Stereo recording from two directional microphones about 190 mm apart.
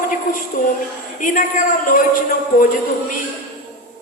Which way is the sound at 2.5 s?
50° left (ahead or behind).